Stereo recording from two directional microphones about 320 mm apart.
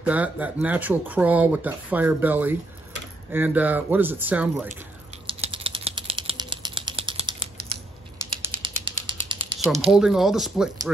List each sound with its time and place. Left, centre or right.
0.0 s speech: centre
5.2 s a sound: centre
9.8 s speech: centre